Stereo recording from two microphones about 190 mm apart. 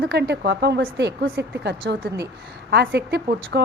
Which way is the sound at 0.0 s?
60° right (ahead or behind).